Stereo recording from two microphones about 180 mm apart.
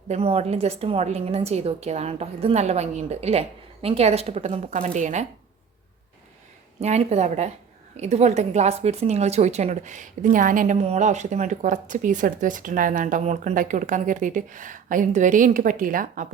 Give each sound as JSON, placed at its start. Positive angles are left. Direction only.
{"t": 0.1, "sound": "a woman's voice", "side_deg": -35}
{"t": 6.7, "sound": "a woman's voice", "side_deg": -35}